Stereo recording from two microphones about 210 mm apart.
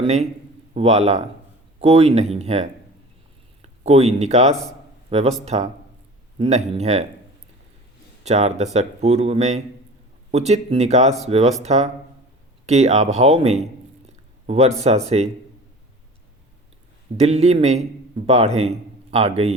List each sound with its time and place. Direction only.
0.0 s speech: 30° right (ahead or behind)
8.2 s speech: 30° right (ahead or behind)
17.2 s speech: 30° right (ahead or behind)